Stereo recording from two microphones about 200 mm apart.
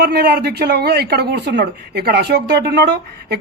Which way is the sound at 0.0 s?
55° right (ahead or behind).